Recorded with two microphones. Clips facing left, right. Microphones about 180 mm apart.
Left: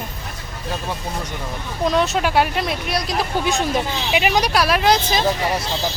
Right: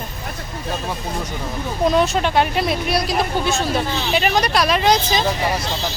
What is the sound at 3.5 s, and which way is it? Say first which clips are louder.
Speech: even; 15° left (ahead or behind).